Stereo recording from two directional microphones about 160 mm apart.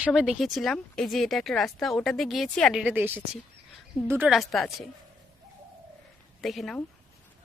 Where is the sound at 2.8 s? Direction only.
10° right (ahead or behind).